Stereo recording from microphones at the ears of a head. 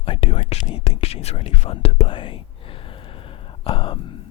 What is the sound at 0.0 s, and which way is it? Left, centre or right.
Speech, left.